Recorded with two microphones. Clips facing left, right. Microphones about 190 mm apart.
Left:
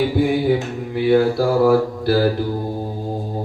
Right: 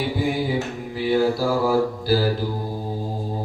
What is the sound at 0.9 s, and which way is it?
Mantra, 60° left (ahead or behind).